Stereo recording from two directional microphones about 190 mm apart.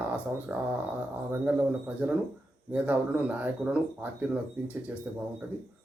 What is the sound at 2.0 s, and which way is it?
Speech, 10° right (ahead or behind).